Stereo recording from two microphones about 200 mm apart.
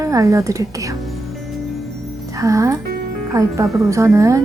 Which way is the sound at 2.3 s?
15° right (ahead or behind).